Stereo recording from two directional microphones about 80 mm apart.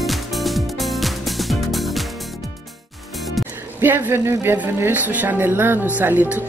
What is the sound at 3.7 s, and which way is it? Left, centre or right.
Speech, right.